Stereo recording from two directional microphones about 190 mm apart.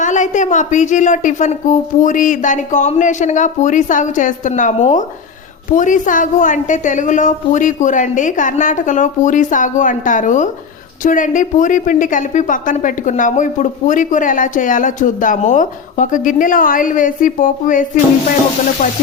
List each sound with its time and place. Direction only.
0.0 s a woman's voice: 40° left (ahead or behind)